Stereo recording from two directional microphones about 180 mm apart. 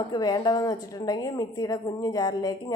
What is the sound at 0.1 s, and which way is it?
A woman's voice, 25° left (ahead or behind).